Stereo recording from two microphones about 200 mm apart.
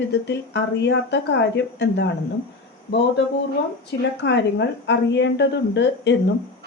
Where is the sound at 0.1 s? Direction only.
60° left (ahead or behind).